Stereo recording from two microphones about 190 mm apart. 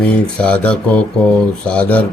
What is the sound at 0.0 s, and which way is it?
Speech, 5° left (ahead or behind).